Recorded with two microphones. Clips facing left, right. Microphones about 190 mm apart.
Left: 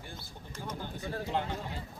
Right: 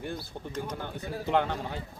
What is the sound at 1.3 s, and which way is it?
Speech, 65° right (ahead or behind).